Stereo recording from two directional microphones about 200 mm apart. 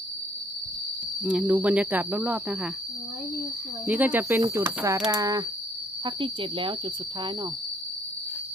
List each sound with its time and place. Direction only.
1.2 s speech: 5° right (ahead or behind)
3.8 s speech: 10° right (ahead or behind)
6.1 s cricket: 25° right (ahead or behind)